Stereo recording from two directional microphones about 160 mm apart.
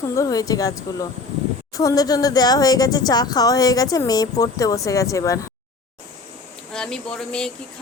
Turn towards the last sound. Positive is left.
turn(degrees=5)  # may be behind; listen again after turning